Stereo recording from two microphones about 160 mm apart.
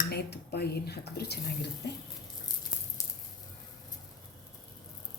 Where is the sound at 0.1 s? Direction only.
90° left.